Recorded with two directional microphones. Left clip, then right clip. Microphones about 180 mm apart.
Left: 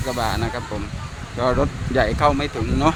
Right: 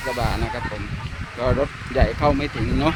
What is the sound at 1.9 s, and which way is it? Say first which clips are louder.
Speech: left 2 dB; 15° left (ahead or behind).